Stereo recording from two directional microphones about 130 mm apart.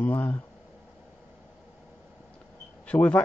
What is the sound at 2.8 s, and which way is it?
Speech, 10° left (ahead or behind).